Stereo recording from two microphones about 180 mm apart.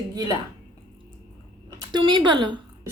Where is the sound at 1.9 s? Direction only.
25° right (ahead or behind).